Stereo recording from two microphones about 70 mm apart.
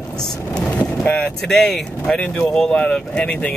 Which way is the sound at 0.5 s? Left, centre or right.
Centre.